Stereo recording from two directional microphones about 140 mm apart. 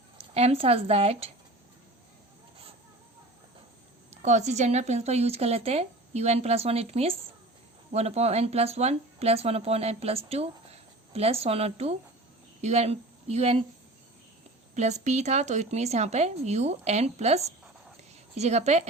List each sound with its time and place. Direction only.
0.2 s speech: 45° right (ahead or behind)
4.1 s speech: 55° right (ahead or behind)
14.8 s speech: 55° right (ahead or behind)